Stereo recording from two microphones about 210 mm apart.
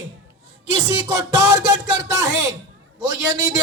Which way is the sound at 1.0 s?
20° right (ahead or behind).